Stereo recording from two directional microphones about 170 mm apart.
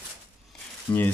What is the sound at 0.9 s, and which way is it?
Speech, 10° left (ahead or behind).